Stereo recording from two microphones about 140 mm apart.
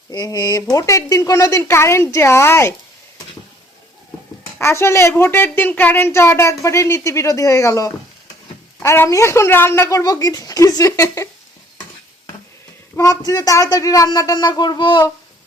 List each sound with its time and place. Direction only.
0.1 s a child's voice: 25° left (ahead or behind)
4.6 s a child's voice: 20° left (ahead or behind)
13.0 s a child's voice: 25° left (ahead or behind)